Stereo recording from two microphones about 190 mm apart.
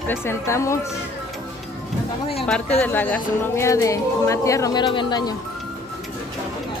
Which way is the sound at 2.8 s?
10° left (ahead or behind).